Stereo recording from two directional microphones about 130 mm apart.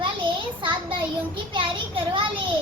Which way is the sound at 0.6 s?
40° right (ahead or behind).